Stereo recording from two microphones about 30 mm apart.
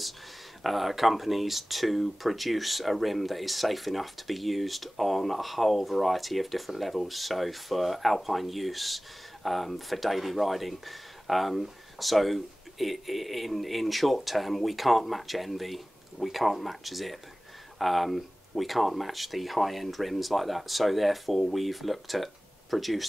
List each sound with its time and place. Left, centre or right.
0.7 s speech: centre